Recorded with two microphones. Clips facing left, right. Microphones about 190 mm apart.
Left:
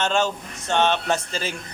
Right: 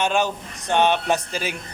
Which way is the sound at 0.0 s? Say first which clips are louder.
Right 1 dB; 15° right (ahead or behind).